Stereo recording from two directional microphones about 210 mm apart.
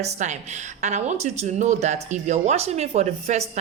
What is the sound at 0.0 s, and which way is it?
A woman's voice, 35° right (ahead or behind).